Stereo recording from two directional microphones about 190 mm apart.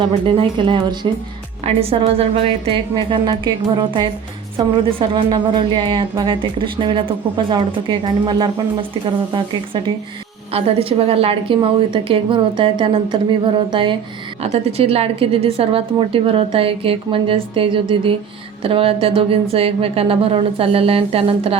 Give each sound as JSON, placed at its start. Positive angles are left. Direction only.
{"t": 0.3, "sound": "a woman's voice", "side_deg": -25}